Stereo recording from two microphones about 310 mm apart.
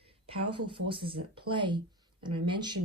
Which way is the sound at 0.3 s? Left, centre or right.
Centre.